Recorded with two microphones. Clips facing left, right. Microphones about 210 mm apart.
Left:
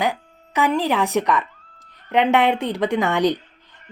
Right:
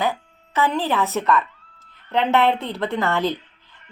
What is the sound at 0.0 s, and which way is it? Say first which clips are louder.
Speech: left 1 dB; 15° left (ahead or behind).